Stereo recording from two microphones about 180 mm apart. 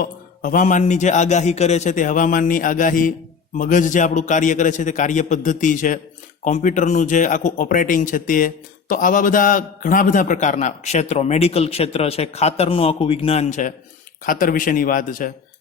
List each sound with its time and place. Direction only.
0.0 s speech: 50° left (ahead or behind)